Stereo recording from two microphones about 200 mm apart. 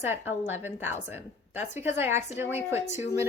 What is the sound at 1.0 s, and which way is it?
A woman's voice, 10° right (ahead or behind).